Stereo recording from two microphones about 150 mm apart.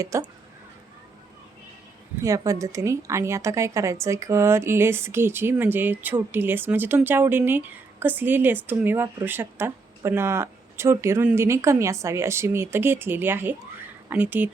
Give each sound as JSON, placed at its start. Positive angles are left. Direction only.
{"t": 0.0, "sound": "speech", "side_deg": -20}
{"t": 2.2, "sound": "a woman's voice", "side_deg": -20}